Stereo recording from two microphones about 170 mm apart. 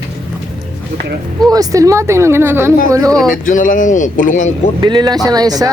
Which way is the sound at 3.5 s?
50° left (ahead or behind).